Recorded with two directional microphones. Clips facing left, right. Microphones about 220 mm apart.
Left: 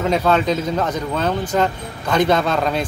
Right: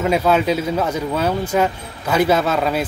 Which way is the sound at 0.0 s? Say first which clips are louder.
Right 1 dB; 10° right (ahead or behind).